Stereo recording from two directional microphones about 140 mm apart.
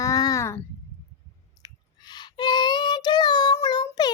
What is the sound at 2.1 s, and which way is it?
Child singing, 30° left (ahead or behind).